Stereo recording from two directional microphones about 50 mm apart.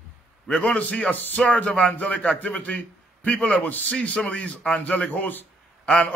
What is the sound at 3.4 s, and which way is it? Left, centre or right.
Speech, centre.